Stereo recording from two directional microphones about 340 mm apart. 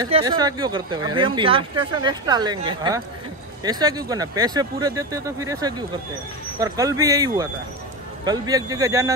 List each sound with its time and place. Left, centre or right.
0.0 s speech: centre